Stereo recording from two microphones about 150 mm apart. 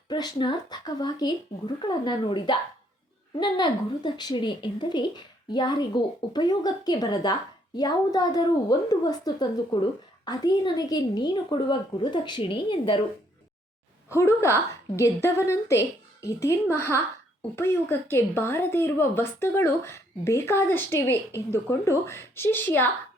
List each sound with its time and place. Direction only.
0.1 s a woman's voice: 30° left (ahead or behind)
14.1 s a woman's voice: 20° left (ahead or behind)